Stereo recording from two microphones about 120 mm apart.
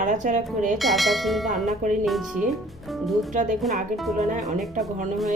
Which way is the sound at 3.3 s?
90° right.